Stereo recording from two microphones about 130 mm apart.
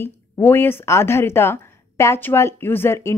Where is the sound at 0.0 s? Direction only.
15° left (ahead or behind).